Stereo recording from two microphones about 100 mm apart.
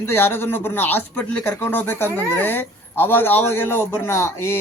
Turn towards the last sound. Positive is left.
turn(degrees=25)  # may be behind; listen again after turning